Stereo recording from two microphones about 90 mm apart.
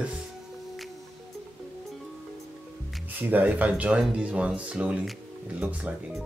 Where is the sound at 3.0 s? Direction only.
20° right (ahead or behind).